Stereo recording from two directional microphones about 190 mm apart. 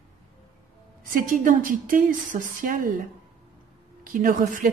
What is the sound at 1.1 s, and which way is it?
A woman's voice, 45° right (ahead or behind).